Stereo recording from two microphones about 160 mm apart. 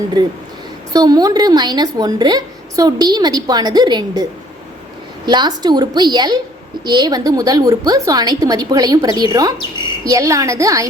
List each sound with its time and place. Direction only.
0.9 s a woman's voice: 25° right (ahead or behind)